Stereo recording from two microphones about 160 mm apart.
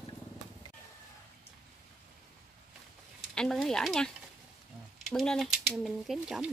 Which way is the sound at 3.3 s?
5° left (ahead or behind).